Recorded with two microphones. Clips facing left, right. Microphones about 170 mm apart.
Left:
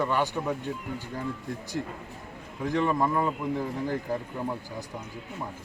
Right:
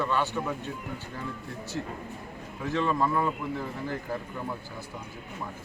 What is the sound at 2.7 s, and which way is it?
Speech, 15° left (ahead or behind).